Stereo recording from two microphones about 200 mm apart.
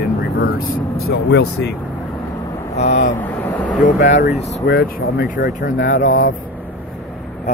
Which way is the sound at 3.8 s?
40° left (ahead or behind).